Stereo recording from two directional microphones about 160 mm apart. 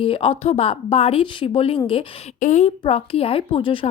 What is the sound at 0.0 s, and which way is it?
Speech, 35° left (ahead or behind).